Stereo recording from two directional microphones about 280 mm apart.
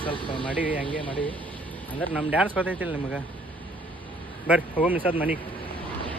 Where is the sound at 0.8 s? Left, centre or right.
Centre.